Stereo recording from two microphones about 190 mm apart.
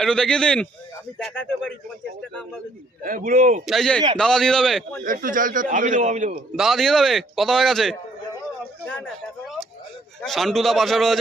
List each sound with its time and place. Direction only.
0.0 s a man's voice: 5° left (ahead or behind)
3.0 s a man's voice: 45° right (ahead or behind)
3.7 s a man's voice: 5° left (ahead or behind)
5.0 s a man's voice: 45° right (ahead or behind)
6.6 s a man's voice: centre (ahead or behind)